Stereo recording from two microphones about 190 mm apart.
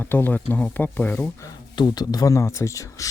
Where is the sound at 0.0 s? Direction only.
10° left (ahead or behind).